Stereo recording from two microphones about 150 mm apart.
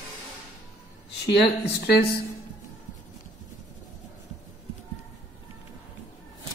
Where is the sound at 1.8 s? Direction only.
90° left.